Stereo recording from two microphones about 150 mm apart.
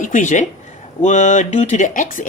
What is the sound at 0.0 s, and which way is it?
A woman's voice, 55° left (ahead or behind).